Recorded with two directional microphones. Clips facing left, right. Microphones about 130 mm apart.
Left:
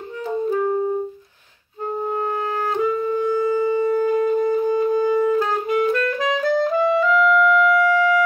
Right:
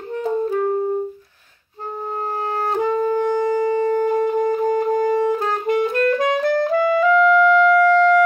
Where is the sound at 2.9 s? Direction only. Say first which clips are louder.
Right 2 dB; 90° right.